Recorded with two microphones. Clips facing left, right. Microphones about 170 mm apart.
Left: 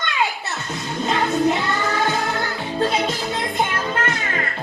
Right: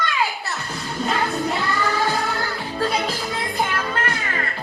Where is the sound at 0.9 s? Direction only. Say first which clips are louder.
Left 2 dB; 20° left (ahead or behind).